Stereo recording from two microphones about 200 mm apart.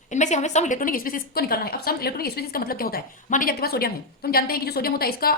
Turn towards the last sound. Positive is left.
turn(degrees=50)  # may be behind; listen again after turning